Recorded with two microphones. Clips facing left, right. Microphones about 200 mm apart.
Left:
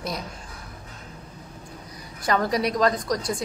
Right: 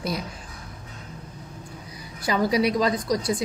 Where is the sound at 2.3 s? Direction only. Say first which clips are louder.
Right 2 dB; 5° right (ahead or behind).